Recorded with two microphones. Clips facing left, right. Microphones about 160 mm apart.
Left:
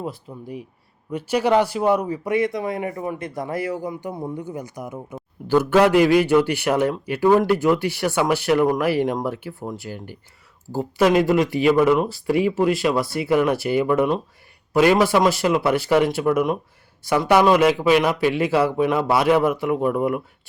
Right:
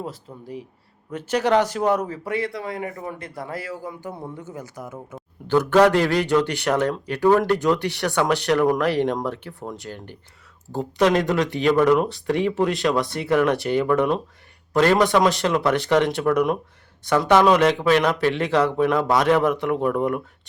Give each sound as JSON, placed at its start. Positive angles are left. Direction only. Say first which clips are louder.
{"t": 1.1, "sound": "a man's voice", "louder": "left 1 dB", "side_deg": 10}